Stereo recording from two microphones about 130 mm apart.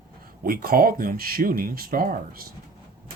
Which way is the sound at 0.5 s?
90° right.